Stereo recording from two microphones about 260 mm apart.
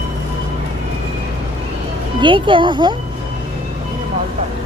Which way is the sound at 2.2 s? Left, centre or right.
Centre.